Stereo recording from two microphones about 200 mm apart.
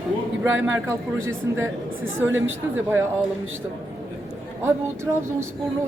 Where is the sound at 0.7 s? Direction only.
10° right (ahead or behind).